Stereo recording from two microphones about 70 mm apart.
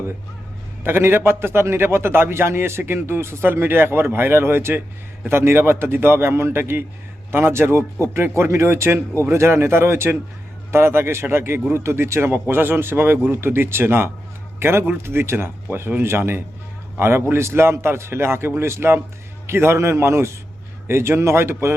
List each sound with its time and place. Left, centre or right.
0.9 s a man's voice: right